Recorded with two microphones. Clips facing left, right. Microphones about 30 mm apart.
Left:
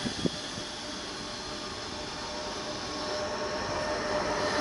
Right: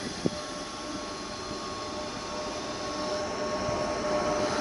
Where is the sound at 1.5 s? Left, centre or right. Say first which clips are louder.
Right 3 dB; centre.